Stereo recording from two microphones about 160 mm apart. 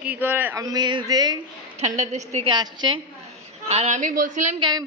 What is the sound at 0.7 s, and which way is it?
Speech, 25° right (ahead or behind).